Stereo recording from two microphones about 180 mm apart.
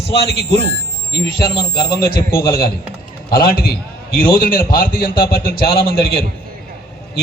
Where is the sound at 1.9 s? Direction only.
55° left (ahead or behind).